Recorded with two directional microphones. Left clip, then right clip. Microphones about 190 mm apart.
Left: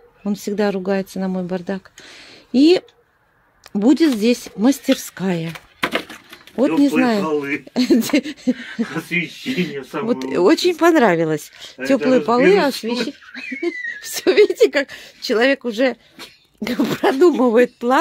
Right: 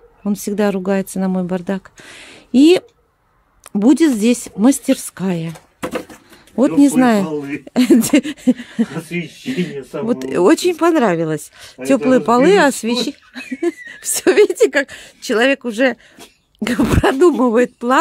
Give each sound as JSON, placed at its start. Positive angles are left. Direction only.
{"t": 0.2, "sound": "speech", "side_deg": -10}
{"t": 6.5, "sound": "speech", "side_deg": -20}
{"t": 9.5, "sound": "speech", "side_deg": -5}
{"t": 13.4, "sound": "whistling", "side_deg": -40}
{"t": 13.7, "sound": "speech", "side_deg": -20}
{"t": 14.7, "sound": "speech", "side_deg": -5}